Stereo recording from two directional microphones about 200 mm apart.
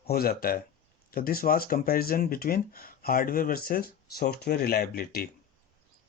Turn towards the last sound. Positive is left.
turn(degrees=50)  # may be behind; listen again after turning